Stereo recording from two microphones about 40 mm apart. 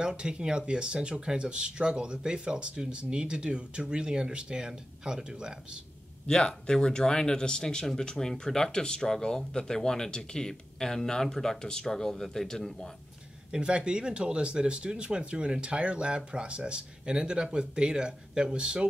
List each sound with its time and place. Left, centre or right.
0.0 s speech: right
6.2 s speech: centre
13.5 s speech: right